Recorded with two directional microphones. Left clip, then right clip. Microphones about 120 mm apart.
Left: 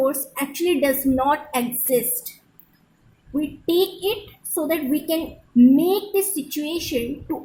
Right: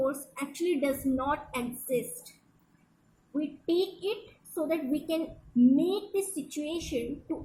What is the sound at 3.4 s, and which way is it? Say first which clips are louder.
A woman's voice: left 8 dB; 90° left.